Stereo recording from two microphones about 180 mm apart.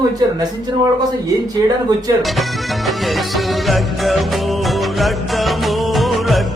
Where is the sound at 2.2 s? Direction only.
Centre (ahead or behind).